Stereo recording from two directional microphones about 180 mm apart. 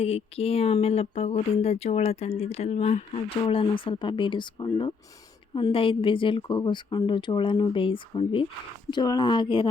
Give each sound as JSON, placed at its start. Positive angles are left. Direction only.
{"t": 0.0, "sound": "a woman's voice", "side_deg": 35}